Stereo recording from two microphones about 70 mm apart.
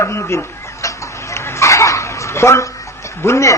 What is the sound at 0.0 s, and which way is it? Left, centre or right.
Chicken, left.